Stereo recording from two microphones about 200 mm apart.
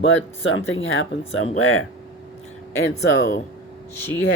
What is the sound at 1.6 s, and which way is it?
Speech, 90° left.